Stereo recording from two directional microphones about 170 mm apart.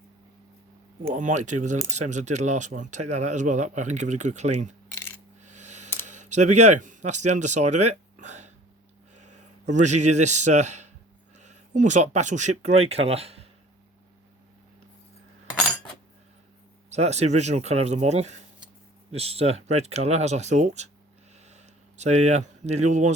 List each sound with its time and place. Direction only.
1.1 s speech: 45° right (ahead or behind)
4.9 s coin: 15° left (ahead or behind)
5.4 s coin: 45° right (ahead or behind)
6.1 s a man's voice: 45° right (ahead or behind)
16.9 s speech: 40° right (ahead or behind)